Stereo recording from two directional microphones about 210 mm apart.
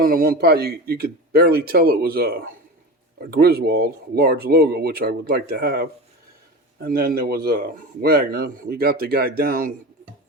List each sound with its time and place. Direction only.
0.0 s speech: 45° right (ahead or behind)